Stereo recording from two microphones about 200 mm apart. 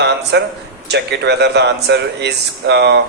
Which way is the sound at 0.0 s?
60° right (ahead or behind).